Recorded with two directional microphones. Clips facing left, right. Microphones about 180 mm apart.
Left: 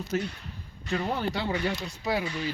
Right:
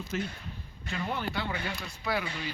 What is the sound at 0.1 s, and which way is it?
Speech, 40° left (ahead or behind).